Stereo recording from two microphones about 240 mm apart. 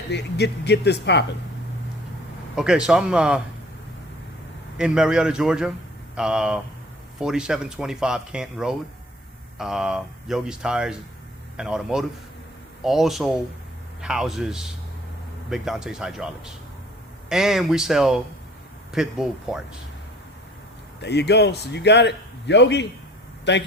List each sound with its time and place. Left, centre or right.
0.1 s a man's voice: left
2.6 s speech: centre
4.8 s speech: centre
21.0 s a man's voice: left